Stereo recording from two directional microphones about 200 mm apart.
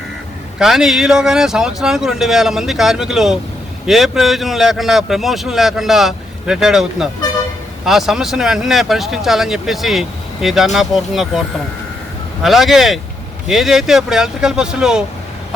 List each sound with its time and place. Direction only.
0.6 s speech: centre (ahead or behind)